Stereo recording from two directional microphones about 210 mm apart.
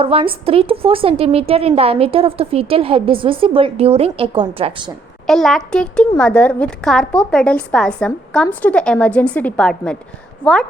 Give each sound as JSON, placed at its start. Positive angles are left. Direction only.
{"t": 0.0, "sound": "a woman's voice", "side_deg": -25}
{"t": 5.2, "sound": "a woman's voice", "side_deg": 0}